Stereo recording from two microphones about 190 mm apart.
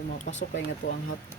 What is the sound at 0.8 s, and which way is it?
Speech, 70° left (ahead or behind).